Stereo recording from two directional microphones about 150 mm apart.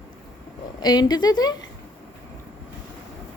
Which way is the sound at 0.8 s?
25° left (ahead or behind).